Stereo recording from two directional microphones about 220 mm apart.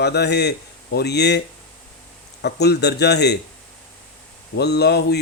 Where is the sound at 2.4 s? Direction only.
50° left (ahead or behind).